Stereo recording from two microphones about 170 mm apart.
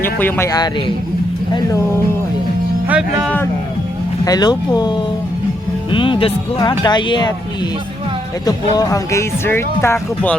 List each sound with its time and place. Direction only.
0.0 s speech: 10° left (ahead or behind)
2.8 s speech: 10° right (ahead or behind)
4.3 s speech: 25° left (ahead or behind)
8.4 s speech: 20° left (ahead or behind)